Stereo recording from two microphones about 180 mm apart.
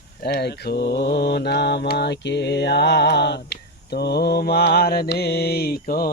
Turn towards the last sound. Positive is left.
turn(degrees=55)  # may be behind; listen again after turning